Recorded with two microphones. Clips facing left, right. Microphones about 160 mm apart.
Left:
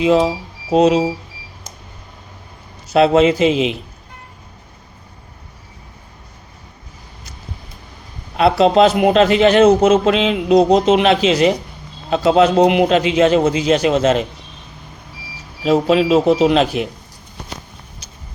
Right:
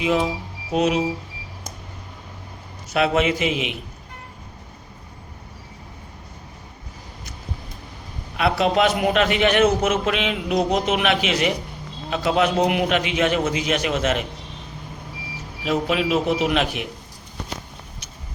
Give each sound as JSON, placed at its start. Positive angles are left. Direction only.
{"t": 0.0, "sound": "speech", "side_deg": 30}
{"t": 2.9, "sound": "a man's voice", "side_deg": 30}
{"t": 8.4, "sound": "a man's voice", "side_deg": 30}
{"t": 15.6, "sound": "a man's voice", "side_deg": 30}